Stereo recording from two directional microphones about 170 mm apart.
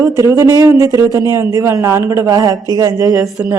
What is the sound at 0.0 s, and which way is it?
A woman's voice, 20° right (ahead or behind).